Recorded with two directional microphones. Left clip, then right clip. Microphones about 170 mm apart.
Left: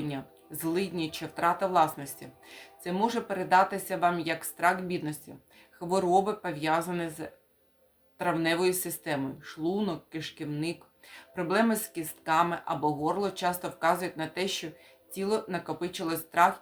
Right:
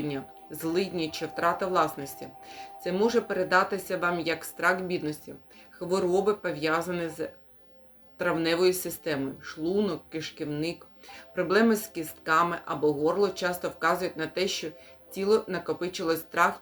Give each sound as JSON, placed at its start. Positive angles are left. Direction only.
{"t": 0.6, "sound": "speech", "side_deg": 15}